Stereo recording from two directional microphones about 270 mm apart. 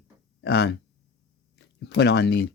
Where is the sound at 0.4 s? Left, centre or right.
Left.